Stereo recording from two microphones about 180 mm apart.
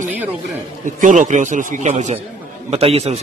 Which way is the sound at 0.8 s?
45° right (ahead or behind).